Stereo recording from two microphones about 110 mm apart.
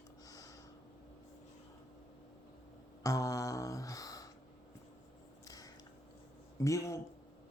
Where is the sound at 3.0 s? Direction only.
30° left (ahead or behind).